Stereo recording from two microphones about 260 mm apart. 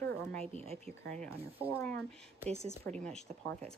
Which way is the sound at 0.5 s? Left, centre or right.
Right.